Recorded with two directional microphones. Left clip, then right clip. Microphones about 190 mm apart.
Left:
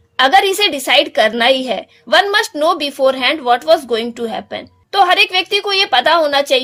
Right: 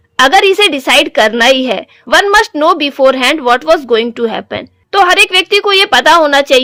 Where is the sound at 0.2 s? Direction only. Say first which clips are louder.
Right 4 dB; 25° right (ahead or behind).